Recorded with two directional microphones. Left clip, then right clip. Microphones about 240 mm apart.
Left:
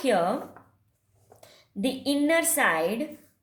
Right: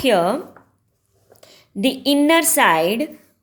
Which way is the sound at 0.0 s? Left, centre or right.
Right.